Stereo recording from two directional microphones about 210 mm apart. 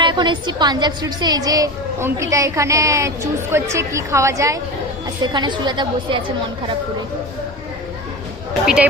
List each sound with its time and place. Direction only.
0.0 s a woman's voice: 20° right (ahead or behind)
8.6 s speech: 5° right (ahead or behind)